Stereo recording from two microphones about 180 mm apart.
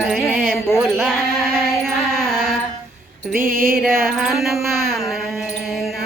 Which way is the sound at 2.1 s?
5° left (ahead or behind).